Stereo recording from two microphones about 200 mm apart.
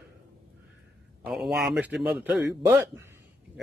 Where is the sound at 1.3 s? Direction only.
Centre (ahead or behind).